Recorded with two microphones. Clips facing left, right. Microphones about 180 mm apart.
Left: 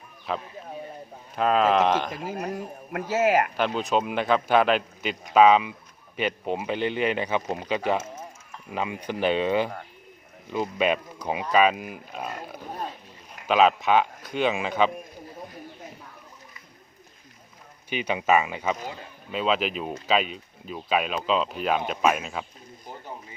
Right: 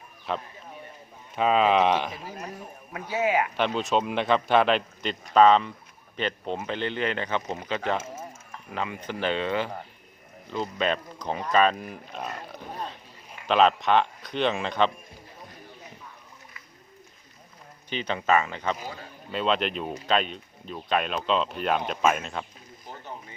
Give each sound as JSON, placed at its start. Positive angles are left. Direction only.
{"t": 0.3, "sound": "speech", "side_deg": 0}
{"t": 2.2, "sound": "speech", "side_deg": 50}
{"t": 3.1, "sound": "speech", "side_deg": 80}
{"t": 3.6, "sound": "speech", "side_deg": 0}
{"t": 17.8, "sound": "speech", "side_deg": 10}